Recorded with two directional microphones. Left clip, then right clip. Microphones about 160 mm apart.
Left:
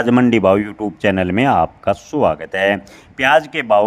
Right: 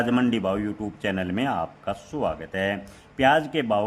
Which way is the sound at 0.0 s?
45° left (ahead or behind).